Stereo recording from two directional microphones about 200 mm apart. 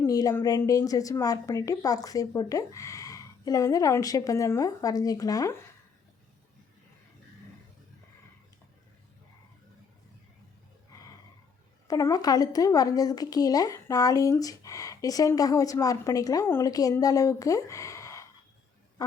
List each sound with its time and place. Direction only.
0.0 s a woman's voice: 15° left (ahead or behind)
11.9 s a woman's voice: 15° left (ahead or behind)